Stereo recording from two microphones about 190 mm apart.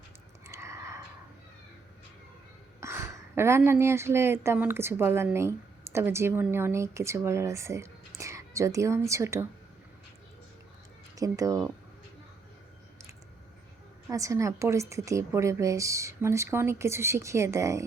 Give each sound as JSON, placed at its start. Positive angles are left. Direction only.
{"t": 0.4, "sound": "a sound", "side_deg": -15}
{"t": 2.8, "sound": "speech", "side_deg": -15}
{"t": 11.1, "sound": "speech", "side_deg": -15}
{"t": 14.1, "sound": "speech", "side_deg": -15}